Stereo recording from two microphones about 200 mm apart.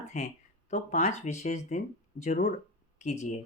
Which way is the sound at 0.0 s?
35° left (ahead or behind).